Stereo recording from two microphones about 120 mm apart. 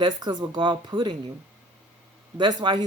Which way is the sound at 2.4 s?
35° right (ahead or behind).